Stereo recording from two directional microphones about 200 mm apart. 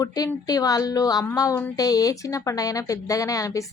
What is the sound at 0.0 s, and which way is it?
A woman's voice, 20° left (ahead or behind).